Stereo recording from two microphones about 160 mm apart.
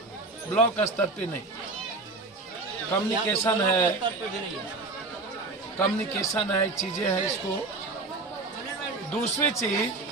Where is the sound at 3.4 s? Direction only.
15° left (ahead or behind).